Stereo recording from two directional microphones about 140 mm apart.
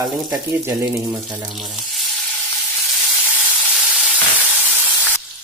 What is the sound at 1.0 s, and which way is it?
Speech, centre (ahead or behind).